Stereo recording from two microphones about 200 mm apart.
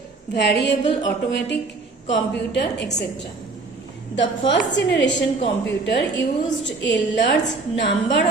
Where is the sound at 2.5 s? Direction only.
55° left (ahead or behind).